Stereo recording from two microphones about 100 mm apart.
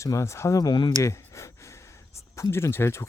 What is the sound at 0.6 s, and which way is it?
Speech, 50° left (ahead or behind).